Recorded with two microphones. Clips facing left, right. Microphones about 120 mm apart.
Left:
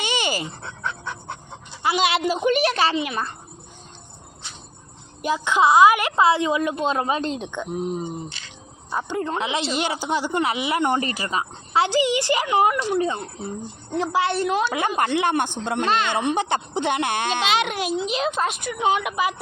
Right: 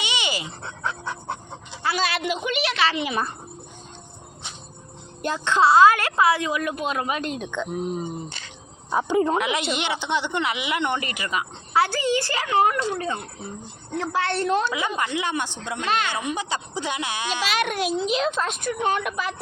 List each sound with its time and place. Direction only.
0.0 s dog: 45° left (ahead or behind)
0.9 s pant: 35° right (ahead or behind)
1.8 s a woman's voice: 20° left (ahead or behind)
2.2 s speech: 40° left (ahead or behind)
3.0 s speech: 5° right (ahead or behind)
5.2 s a woman's voice: 10° left (ahead or behind)
8.9 s speech: 10° right (ahead or behind)
9.4 s a woman's voice: 30° left (ahead or behind); by 14.7 s 5° left (ahead or behind)
14.7 s speech: 55° left (ahead or behind)
17.4 s a woman's voice: 25° left (ahead or behind)
17.7 s a child's voice: centre (ahead or behind)